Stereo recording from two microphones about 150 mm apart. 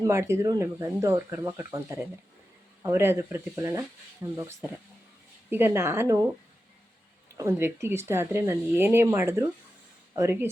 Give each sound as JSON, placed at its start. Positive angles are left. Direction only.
{"t": 0.0, "sound": "speech", "side_deg": -20}
{"t": 5.5, "sound": "speech", "side_deg": -15}
{"t": 7.3, "sound": "speech", "side_deg": -15}